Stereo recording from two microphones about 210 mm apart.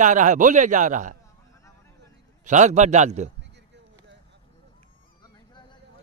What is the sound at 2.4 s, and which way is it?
Speech, 35° right (ahead or behind).